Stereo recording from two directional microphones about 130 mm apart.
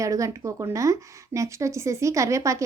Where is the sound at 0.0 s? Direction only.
25° right (ahead or behind).